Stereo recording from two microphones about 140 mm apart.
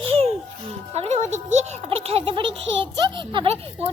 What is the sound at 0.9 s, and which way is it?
A child's voice, 50° right (ahead or behind).